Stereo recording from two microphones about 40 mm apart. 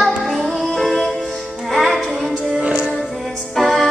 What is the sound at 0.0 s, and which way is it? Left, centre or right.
Music, centre.